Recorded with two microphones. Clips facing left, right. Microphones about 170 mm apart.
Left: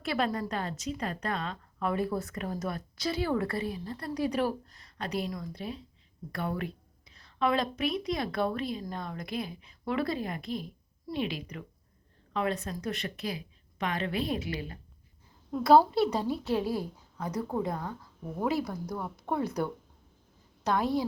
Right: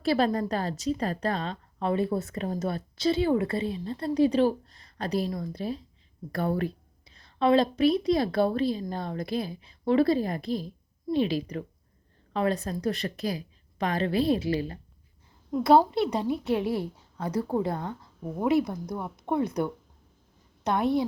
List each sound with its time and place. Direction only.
0.0 s a woman's voice: 30° right (ahead or behind)
15.6 s a woman's voice: 20° right (ahead or behind)
20.7 s a woman's voice: 25° right (ahead or behind)